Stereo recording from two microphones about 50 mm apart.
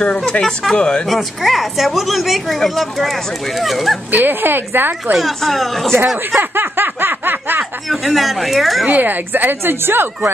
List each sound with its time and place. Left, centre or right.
0.0 s speech: centre
1.0 s a woman's voice: centre
4.1 s a woman's voice: right
5.1 s a woman's voice: centre
6.5 s snicker: right
7.9 s a woman's voice: centre
8.8 s a woman's voice: right